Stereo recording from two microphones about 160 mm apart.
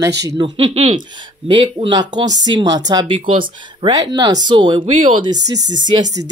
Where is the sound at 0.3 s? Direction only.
25° right (ahead or behind).